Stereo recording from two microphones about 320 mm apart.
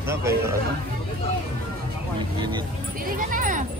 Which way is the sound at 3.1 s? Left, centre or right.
Right.